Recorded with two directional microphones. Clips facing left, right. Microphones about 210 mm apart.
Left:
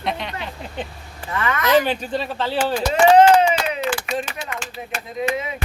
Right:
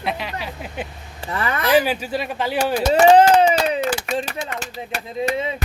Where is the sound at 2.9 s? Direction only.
35° right (ahead or behind).